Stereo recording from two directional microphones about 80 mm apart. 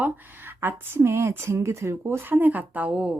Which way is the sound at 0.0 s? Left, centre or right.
Right.